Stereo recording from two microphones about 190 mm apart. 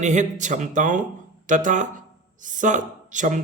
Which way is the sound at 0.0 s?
40° right (ahead or behind).